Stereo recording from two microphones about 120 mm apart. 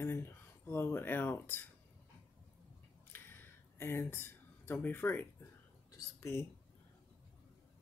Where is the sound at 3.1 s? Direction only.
15° left (ahead or behind).